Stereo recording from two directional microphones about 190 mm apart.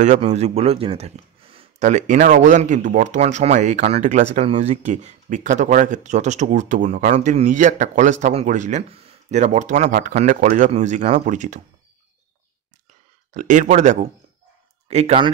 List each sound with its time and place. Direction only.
0.0 s speech: 35° right (ahead or behind)
13.3 s speech: 40° right (ahead or behind)